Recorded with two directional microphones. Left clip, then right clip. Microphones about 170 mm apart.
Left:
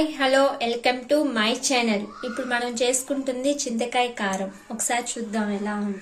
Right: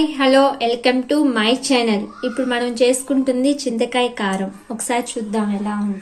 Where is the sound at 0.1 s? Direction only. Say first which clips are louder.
Right 6 dB; 50° right (ahead or behind).